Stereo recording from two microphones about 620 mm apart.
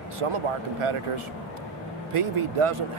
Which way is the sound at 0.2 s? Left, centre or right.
Right.